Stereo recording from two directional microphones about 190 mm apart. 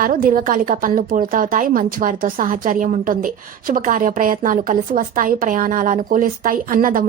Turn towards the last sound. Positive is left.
turn(degrees=-45)  # may be behind; listen again after turning